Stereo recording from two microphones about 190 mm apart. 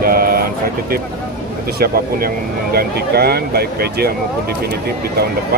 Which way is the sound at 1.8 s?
55° right (ahead or behind).